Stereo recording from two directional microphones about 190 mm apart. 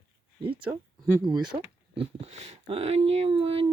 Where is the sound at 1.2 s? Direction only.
20° right (ahead or behind).